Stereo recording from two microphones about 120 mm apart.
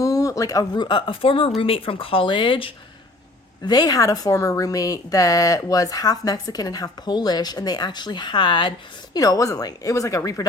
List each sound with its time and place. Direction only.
0.0 s speech: 30° left (ahead or behind); by 2.7 s 45° left (ahead or behind)
3.7 s speech: 35° left (ahead or behind)
9.1 s speech: 30° left (ahead or behind)